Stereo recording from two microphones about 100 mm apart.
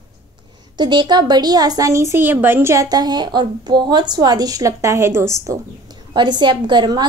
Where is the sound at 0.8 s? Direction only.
50° right (ahead or behind); by 5.6 s 30° right (ahead or behind).